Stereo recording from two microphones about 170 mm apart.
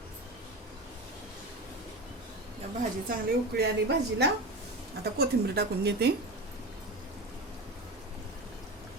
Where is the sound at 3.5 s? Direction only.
80° right.